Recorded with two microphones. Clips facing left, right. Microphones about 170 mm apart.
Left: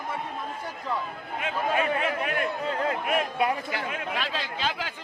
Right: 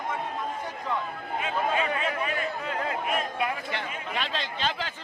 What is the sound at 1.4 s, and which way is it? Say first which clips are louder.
A man's voice: left 1 dB; 55° left (ahead or behind).